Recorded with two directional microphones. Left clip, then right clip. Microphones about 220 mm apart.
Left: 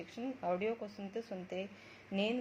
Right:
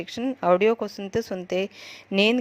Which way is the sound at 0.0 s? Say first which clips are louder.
Right 15 dB; 35° right (ahead or behind).